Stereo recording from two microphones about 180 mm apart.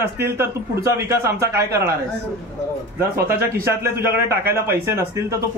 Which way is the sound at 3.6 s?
15° right (ahead or behind).